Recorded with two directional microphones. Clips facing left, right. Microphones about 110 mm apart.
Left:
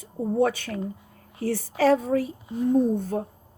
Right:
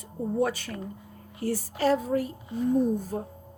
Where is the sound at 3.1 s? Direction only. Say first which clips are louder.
Left 4 dB; 90° left.